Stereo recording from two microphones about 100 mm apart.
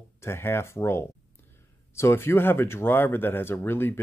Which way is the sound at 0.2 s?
25° left (ahead or behind).